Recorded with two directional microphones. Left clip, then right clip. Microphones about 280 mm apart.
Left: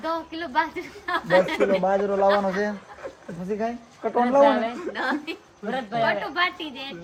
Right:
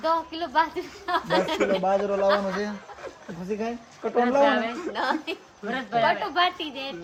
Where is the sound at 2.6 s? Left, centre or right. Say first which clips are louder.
Left 4 dB; centre.